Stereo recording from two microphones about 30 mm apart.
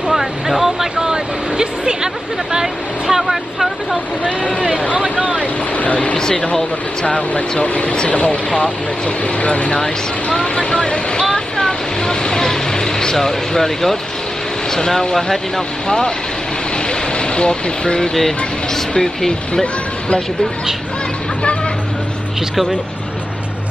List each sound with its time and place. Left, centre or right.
0.1 s vehicle: centre
0.9 s vehicle: right
2.6 s speech: centre
4.9 s a sound: right
6.1 s speech: left
7.1 s speech: left
10.3 s speech: left
11.3 s a sound: left
15.1 s speech: centre
16.7 s a sound: left
18.9 s speech: centre